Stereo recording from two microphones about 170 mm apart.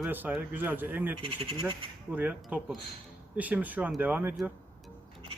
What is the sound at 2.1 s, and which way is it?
A man's voice, 10° right (ahead or behind).